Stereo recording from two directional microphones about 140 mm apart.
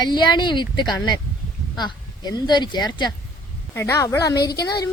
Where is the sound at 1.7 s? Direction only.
30° left (ahead or behind).